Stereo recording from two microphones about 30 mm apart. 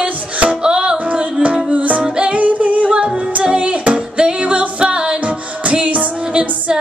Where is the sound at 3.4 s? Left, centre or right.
Right.